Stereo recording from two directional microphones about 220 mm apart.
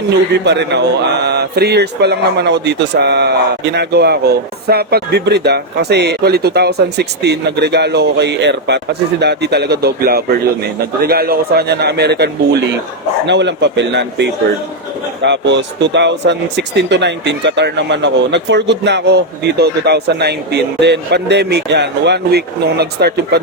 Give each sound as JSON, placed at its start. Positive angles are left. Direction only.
{"t": 0.4, "sound": "a man's voice", "side_deg": -50}